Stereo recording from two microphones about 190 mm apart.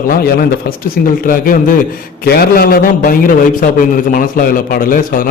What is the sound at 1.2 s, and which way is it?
A man's voice, 45° left (ahead or behind).